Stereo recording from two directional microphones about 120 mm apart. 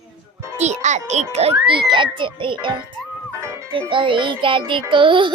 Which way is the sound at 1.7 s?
45° right (ahead or behind).